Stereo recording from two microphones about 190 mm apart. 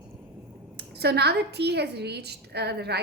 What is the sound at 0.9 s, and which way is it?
A woman's voice, 60° right (ahead or behind).